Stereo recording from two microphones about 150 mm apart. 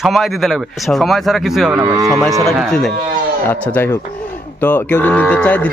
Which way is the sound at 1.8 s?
20° right (ahead or behind).